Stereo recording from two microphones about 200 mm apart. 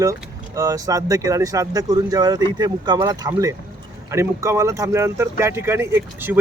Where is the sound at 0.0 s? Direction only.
15° right (ahead or behind).